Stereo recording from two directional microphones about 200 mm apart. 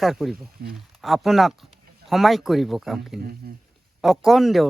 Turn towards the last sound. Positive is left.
turn(degrees=0)  # may be behind; listen again after turning